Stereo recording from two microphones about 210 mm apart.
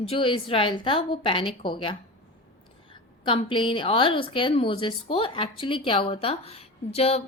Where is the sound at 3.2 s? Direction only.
25° left (ahead or behind).